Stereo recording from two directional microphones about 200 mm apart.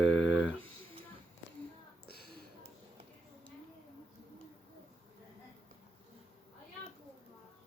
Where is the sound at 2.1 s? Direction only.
55° left (ahead or behind).